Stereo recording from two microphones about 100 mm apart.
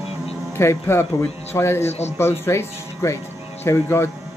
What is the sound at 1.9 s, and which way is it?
Speech, 90° left.